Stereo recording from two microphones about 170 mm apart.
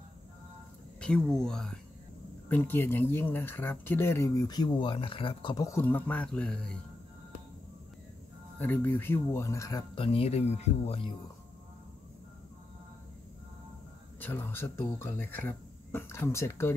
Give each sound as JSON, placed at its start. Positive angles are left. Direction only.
{"t": 1.0, "sound": "speech", "side_deg": 5}
{"t": 8.5, "sound": "speech", "side_deg": 10}
{"t": 10.0, "sound": "speech", "side_deg": 35}
{"t": 14.2, "sound": "speech", "side_deg": 10}